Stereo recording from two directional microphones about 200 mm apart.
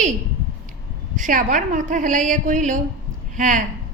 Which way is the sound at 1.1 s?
40° right (ahead or behind).